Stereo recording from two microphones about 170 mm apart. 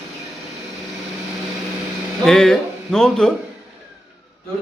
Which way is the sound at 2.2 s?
5° left (ahead or behind).